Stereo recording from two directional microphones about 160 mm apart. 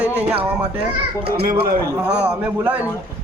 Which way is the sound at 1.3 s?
75° right (ahead or behind).